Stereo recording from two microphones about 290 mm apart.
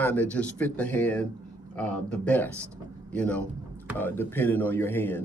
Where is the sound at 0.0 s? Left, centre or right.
Centre.